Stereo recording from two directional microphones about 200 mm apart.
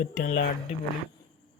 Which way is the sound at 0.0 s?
45° left (ahead or behind).